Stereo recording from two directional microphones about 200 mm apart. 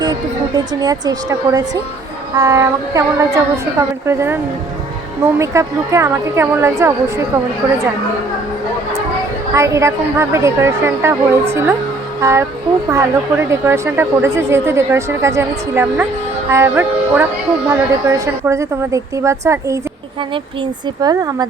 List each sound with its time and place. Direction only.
0.0 s a woman's voice: 20° right (ahead or behind)
5.4 s a woman's voice: 15° right (ahead or behind)
9.6 s a woman's voice: 15° right (ahead or behind)